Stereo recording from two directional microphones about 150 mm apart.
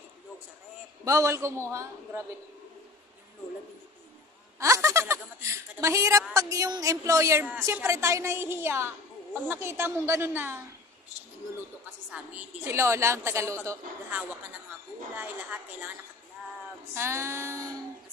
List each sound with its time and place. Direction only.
1.0 s a woman's voice: 20° right (ahead or behind)
4.6 s a woman's voice: 20° right (ahead or behind)
12.6 s a woman's voice: 20° right (ahead or behind)
15.1 s a woman's voice: 15° right (ahead or behind)
16.9 s a woman's voice: 15° right (ahead or behind)